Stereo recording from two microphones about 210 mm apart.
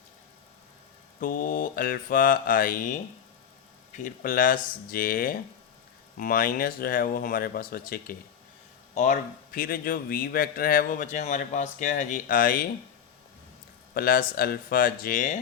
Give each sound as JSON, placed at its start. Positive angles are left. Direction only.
{"t": 1.2, "sound": "mantra", "side_deg": 40}
{"t": 3.9, "sound": "mantra", "side_deg": 40}
{"t": 6.1, "sound": "speech", "side_deg": 45}
{"t": 13.9, "sound": "speech", "side_deg": 45}